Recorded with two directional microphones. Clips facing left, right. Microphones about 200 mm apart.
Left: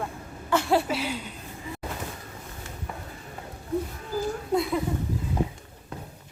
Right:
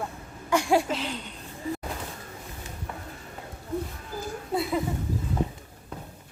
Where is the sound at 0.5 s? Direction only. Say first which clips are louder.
Even; 15° right (ahead or behind).